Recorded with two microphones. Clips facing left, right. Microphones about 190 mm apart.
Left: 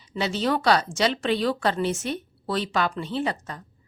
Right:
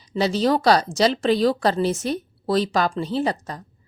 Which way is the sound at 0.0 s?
35° right (ahead or behind).